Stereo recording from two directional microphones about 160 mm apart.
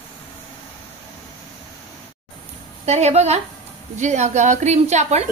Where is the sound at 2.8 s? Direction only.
45° right (ahead or behind).